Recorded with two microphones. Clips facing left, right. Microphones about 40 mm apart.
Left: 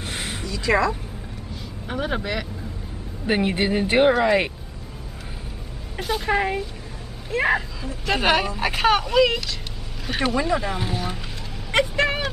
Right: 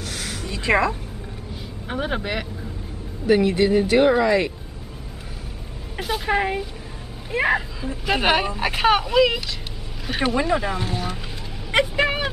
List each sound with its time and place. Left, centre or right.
0.0 s a sound: left
0.5 s a woman's voice: right
1.5 s vehicle: centre
3.3 s speech: left
5.9 s speech: centre
10.8 s speech: centre
11.7 s vehicle: centre